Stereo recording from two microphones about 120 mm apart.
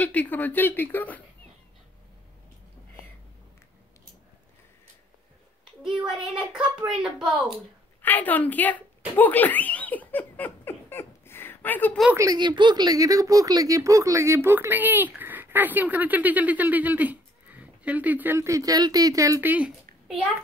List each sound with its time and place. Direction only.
0.0 s speech: 15° left (ahead or behind)
5.8 s a child's voice: 5° right (ahead or behind)
8.0 s speech: 15° left (ahead or behind)
9.1 s giggle: 15° left (ahead or behind)
12.2 s speech: 35° right (ahead or behind)
19.4 s a child's voice: 15° right (ahead or behind)